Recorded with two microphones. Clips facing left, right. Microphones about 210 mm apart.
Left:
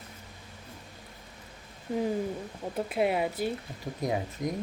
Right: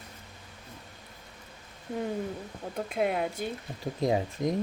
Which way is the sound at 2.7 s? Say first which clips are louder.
Left 1 dB; 5° left (ahead or behind).